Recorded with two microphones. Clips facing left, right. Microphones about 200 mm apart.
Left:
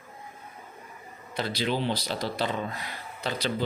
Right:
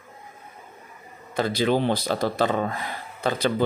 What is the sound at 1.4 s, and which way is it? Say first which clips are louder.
Speech: right 7 dB; 50° right (ahead or behind).